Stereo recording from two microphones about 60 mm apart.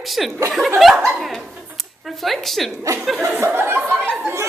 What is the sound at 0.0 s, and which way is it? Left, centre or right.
Speech, centre.